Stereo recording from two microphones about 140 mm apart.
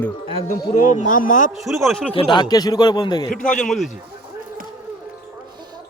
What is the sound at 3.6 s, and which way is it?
Speech, centre (ahead or behind).